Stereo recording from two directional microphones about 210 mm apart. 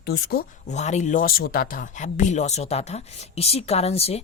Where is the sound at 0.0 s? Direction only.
50° left (ahead or behind).